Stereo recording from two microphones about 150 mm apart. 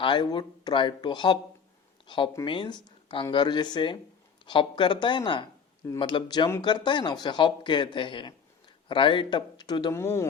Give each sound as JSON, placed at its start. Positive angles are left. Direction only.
{"t": 0.0, "sound": "speech", "side_deg": 30}
{"t": 9.9, "sound": "speech", "side_deg": 15}